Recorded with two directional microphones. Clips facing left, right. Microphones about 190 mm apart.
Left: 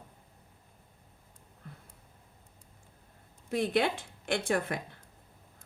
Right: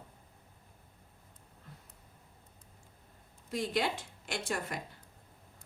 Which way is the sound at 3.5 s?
60° left (ahead or behind).